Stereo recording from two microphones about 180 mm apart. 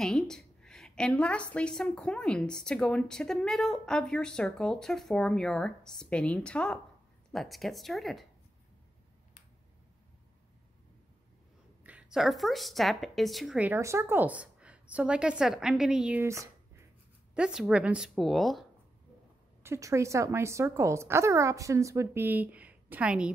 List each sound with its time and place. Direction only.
0.0 s a woman's voice: 5° left (ahead or behind)
11.8 s a woman's voice: 5° right (ahead or behind)
19.6 s speech: 15° right (ahead or behind)